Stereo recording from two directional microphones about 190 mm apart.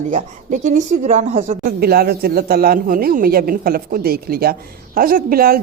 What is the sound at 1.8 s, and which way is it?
Speech, 55° right (ahead or behind).